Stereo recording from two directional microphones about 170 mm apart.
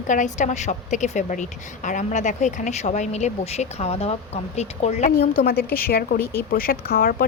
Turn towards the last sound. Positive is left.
turn(degrees=55)  # may be behind; listen again after turning